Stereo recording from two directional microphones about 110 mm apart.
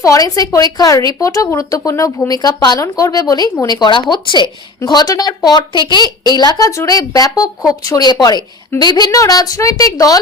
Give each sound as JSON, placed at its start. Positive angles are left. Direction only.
{"t": 0.0, "sound": "a woman's voice", "side_deg": 30}